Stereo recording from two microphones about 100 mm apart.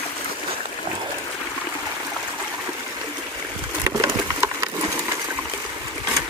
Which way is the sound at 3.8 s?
25° right (ahead or behind).